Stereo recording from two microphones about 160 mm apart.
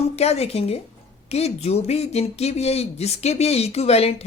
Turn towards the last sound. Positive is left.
turn(degrees=40)  # may be behind; listen again after turning